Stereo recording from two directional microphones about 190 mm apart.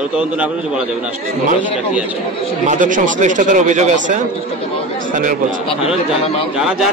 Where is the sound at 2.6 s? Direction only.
40° right (ahead or behind).